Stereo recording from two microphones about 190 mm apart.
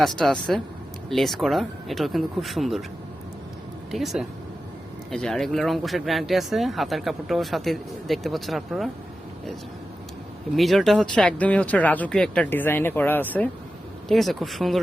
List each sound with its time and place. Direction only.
0.0 s speech: 5° left (ahead or behind)
3.9 s speech: centre (ahead or behind)
10.5 s speech: centre (ahead or behind)